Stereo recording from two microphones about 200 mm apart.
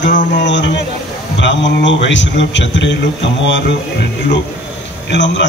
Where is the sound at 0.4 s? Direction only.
65° left (ahead or behind).